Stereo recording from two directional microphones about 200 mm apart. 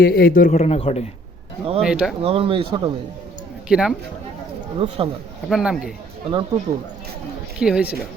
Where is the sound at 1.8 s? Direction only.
5° right (ahead or behind).